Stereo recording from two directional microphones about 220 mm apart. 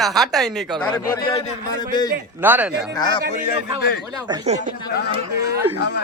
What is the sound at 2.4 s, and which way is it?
Speech, 10° right (ahead or behind).